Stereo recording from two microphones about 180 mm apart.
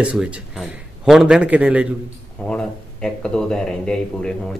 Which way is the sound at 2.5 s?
5° left (ahead or behind).